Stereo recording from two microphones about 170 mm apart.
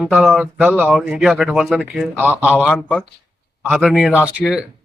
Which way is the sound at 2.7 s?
5° left (ahead or behind).